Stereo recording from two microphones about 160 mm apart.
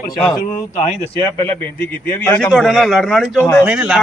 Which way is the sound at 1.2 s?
15° left (ahead or behind).